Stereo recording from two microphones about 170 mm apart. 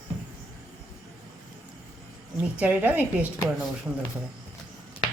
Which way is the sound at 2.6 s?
10° right (ahead or behind).